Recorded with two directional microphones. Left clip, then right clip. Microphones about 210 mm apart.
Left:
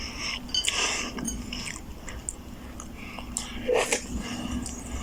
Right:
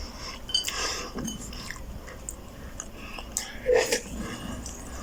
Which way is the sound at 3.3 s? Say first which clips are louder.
Right 2 dB; 5° right (ahead or behind).